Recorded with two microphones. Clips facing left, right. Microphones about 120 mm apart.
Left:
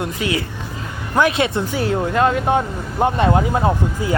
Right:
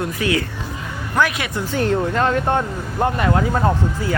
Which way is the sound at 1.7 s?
5° left (ahead or behind).